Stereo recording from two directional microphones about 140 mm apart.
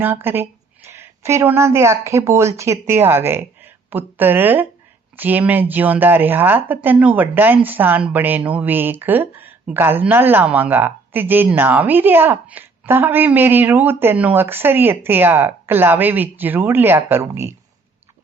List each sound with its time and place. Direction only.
0.0 s a woman's voice: 15° right (ahead or behind)